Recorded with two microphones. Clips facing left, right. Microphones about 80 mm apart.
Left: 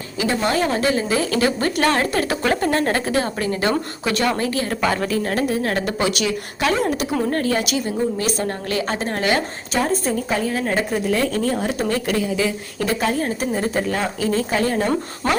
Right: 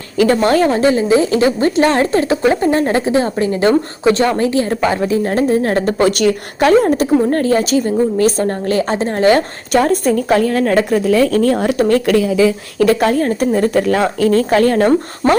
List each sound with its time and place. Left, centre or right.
0.2 s a woman's voice: right
0.7 s a woman's voice: right
9.3 s speech: right
11.5 s speech: right